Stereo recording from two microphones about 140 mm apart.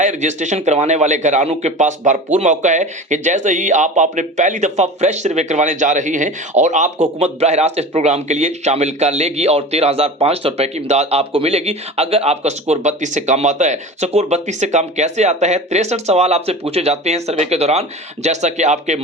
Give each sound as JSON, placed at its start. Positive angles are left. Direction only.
{"t": 0.0, "sound": "a man's voice", "side_deg": -55}